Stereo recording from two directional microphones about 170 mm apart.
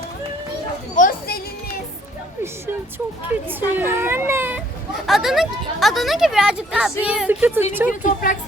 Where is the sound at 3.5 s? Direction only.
10° right (ahead or behind).